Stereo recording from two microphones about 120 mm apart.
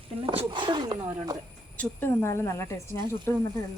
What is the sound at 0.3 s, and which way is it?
Speech, 40° right (ahead or behind).